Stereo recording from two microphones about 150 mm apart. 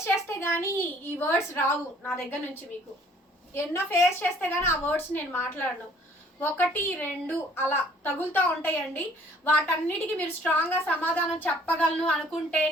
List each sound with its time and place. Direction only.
0.0 s a woman's voice: 15° left (ahead or behind)
3.5 s a woman's voice: 15° left (ahead or behind)